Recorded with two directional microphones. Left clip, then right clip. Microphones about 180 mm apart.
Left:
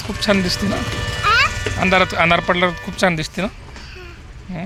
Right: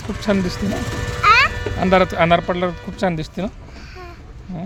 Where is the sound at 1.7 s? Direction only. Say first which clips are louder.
Left 1 dB; 25° right (ahead or behind).